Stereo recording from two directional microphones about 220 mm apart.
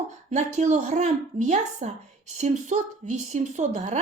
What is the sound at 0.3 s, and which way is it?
Speech, 30° right (ahead or behind).